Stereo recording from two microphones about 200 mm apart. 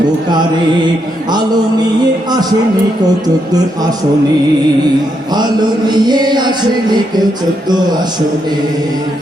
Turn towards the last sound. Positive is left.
turn(degrees=-20)  # may be behind; listen again after turning